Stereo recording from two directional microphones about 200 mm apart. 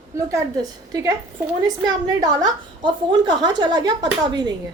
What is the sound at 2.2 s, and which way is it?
A woman's voice, 20° right (ahead or behind).